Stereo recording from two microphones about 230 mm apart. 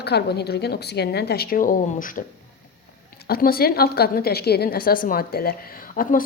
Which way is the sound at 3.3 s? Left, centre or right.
Left.